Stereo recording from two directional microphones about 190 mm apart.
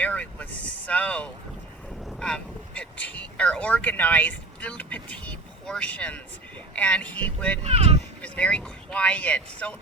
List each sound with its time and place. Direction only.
0.0 s vehicle: 5° left (ahead or behind)
2.0 s speech: 5° left (ahead or behind)
7.6 s speech: 30° right (ahead or behind)
8.2 s speech: 5° left (ahead or behind)